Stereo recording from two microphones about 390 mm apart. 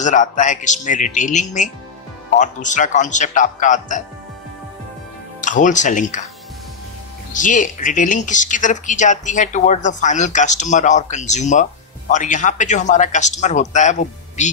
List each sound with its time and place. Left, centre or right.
0.0 s speech: centre
5.4 s speech: centre
7.3 s a man's voice: centre